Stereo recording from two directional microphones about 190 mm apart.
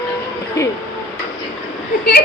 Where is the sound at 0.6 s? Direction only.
20° left (ahead or behind).